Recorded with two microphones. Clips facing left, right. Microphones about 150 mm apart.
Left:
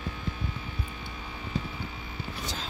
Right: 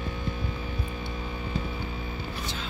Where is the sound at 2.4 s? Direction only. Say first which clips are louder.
Right 1 dB; 40° left (ahead or behind).